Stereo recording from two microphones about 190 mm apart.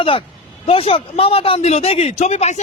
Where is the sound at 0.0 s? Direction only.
30° left (ahead or behind).